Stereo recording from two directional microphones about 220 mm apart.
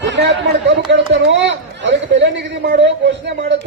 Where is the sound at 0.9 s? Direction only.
55° right (ahead or behind).